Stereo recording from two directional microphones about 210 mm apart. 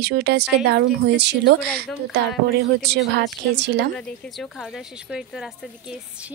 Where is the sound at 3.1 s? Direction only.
55° right (ahead or behind).